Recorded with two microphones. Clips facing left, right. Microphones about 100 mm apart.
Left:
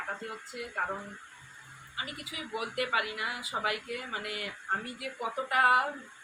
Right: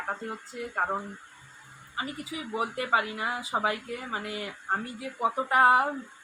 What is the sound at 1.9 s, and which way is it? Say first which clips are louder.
Speech: right 6 dB; 35° right (ahead or behind).